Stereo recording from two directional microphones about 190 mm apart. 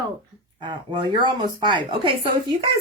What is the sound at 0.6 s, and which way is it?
A woman's voice, 25° right (ahead or behind).